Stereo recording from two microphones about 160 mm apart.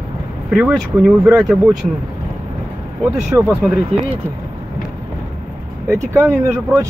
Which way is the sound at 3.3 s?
20° right (ahead or behind).